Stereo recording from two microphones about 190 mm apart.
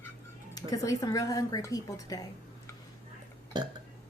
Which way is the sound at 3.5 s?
20° right (ahead or behind).